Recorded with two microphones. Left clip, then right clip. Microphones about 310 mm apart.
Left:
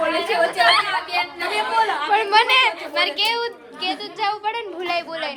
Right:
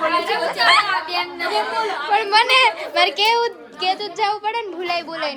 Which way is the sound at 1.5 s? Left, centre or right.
Centre.